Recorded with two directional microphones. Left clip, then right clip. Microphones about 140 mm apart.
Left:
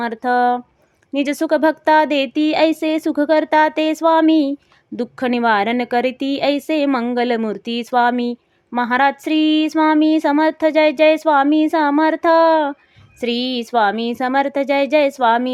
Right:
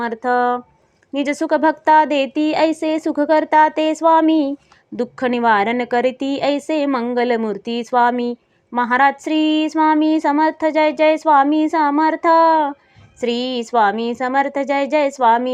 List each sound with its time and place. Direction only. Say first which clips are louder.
0.0 s a woman's voice: left 1 dB; 25° left (ahead or behind)